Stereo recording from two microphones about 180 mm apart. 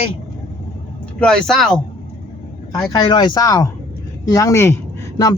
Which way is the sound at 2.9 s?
25° left (ahead or behind).